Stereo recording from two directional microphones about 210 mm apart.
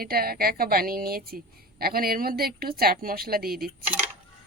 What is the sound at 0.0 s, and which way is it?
A woman's voice, 45° right (ahead or behind).